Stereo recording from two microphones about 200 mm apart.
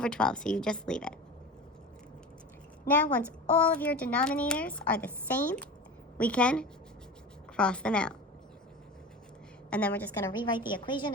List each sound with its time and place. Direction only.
0.0 s a woman's voice: 5° left (ahead or behind)
2.8 s a woman's voice: 10° left (ahead or behind)
9.6 s a woman's voice: 5° left (ahead or behind)
10.7 s a woman's voice: 25° left (ahead or behind)